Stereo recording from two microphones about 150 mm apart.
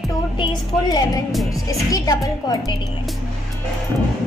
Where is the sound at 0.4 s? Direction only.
25° left (ahead or behind).